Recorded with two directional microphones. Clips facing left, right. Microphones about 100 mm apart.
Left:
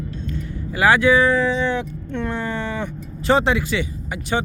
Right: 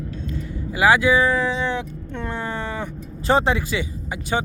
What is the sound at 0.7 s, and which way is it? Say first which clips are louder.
Speech: left 1 dB; 10° right (ahead or behind).